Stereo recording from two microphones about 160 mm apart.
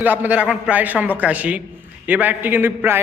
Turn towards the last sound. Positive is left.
turn(degrees=-15)  # may be behind; listen again after turning